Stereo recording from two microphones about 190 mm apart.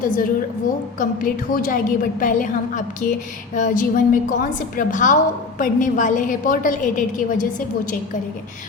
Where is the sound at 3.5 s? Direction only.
45° left (ahead or behind).